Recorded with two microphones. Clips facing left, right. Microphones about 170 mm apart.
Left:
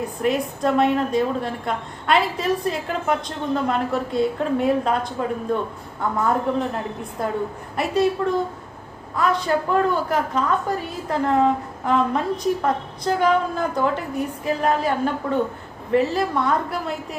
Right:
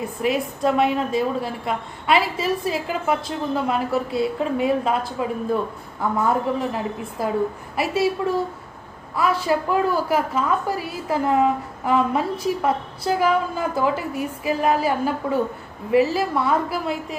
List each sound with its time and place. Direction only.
0.2 s a woman's voice: centre (ahead or behind)